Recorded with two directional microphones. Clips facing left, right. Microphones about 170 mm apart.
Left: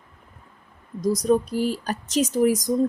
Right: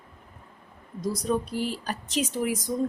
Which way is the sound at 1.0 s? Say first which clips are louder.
Left 7 dB; 40° left (ahead or behind).